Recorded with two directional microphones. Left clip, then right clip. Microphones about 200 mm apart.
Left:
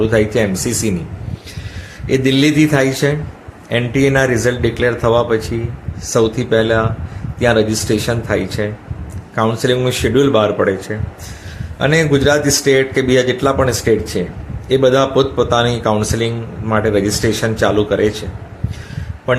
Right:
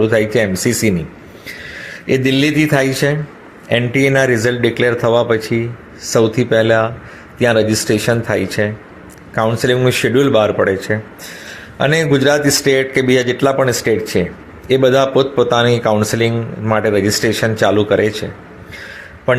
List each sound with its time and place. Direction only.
0.0 s a man's voice: 15° right (ahead or behind)
2.0 s a man's voice: 15° right (ahead or behind)
19.3 s a man's voice: 15° right (ahead or behind)